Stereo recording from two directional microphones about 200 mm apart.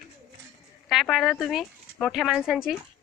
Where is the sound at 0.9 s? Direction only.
Centre (ahead or behind).